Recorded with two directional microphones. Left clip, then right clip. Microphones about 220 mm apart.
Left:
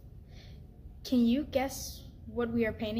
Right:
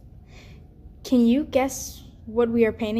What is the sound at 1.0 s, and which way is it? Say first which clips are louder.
A woman's voice: right 9 dB; 30° right (ahead or behind).